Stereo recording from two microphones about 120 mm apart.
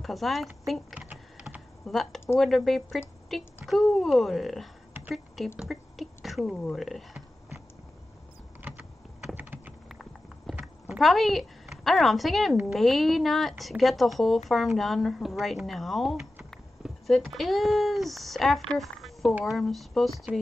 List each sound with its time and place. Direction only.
0.0 s speech: centre (ahead or behind)
9.3 s typing: 15° right (ahead or behind)
9.8 s clip-clop: 5° left (ahead or behind)
10.5 s speech: 5° right (ahead or behind)
20.3 s speech: 15° right (ahead or behind)